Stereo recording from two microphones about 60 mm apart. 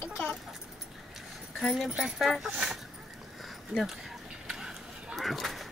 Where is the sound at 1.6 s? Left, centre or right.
Centre.